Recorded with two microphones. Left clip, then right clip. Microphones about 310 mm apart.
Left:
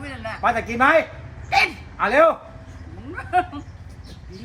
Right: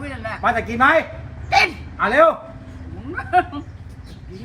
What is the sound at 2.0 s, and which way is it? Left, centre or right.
Speech, centre.